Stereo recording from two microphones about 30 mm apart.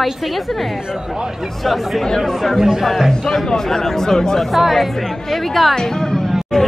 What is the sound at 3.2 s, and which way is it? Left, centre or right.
Speech, centre.